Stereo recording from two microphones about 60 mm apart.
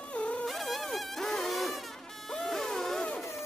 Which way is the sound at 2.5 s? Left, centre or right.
Centre.